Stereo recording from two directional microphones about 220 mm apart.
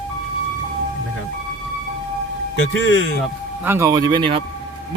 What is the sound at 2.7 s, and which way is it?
Speech, 60° left (ahead or behind).